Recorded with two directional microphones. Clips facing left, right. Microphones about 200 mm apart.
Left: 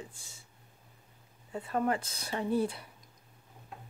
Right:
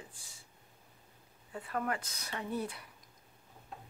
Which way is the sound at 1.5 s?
25° left (ahead or behind).